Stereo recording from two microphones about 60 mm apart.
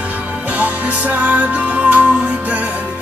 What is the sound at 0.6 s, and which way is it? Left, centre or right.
Music, right.